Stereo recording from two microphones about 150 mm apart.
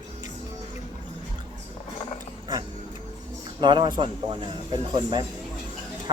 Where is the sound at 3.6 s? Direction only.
30° right (ahead or behind).